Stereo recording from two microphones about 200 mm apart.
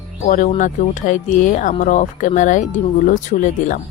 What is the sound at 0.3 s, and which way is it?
Speech, 35° left (ahead or behind).